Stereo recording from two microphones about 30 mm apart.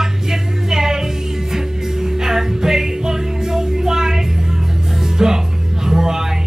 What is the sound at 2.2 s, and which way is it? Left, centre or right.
Music, centre.